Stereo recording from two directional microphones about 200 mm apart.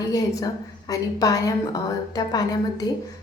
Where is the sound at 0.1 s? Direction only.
20° left (ahead or behind).